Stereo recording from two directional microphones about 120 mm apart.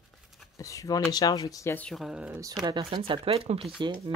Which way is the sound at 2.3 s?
30° right (ahead or behind).